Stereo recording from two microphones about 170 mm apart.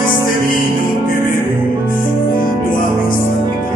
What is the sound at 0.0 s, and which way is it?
Music, 55° left (ahead or behind).